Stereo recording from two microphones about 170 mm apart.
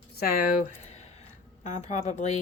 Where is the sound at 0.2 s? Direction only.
55° left (ahead or behind).